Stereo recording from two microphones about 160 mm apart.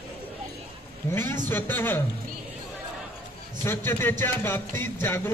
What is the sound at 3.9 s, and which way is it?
Speech, 15° left (ahead or behind).